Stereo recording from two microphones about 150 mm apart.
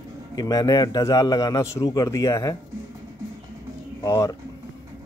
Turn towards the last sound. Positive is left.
turn(degrees=25)  # may be behind; listen again after turning